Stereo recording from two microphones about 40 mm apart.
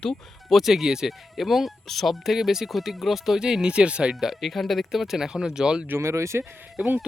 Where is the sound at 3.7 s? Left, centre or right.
Right.